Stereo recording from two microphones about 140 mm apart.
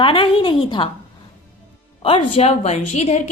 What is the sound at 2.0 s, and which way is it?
A woman's voice, 45° left (ahead or behind).